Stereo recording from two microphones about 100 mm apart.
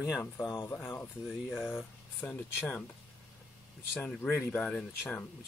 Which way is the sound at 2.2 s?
20° left (ahead or behind).